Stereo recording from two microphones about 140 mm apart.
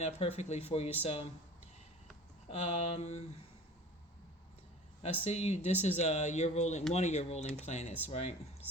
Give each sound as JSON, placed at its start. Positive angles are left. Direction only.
{"t": 0.0, "sound": "speech", "side_deg": 50}
{"t": 2.5, "sound": "speech", "side_deg": 55}
{"t": 5.2, "sound": "speech", "side_deg": 50}